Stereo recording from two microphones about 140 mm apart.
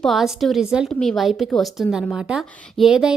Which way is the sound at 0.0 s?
Centre (ahead or behind).